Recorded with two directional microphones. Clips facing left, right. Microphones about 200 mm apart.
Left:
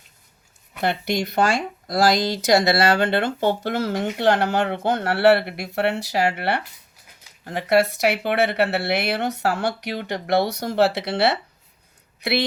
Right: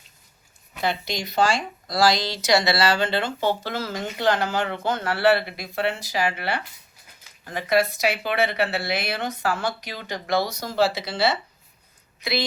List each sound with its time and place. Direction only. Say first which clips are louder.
0.8 s speech: left 4 dB; 60° left (ahead or behind)
7.5 s a woman's voice: left 3 dB; 65° left (ahead or behind)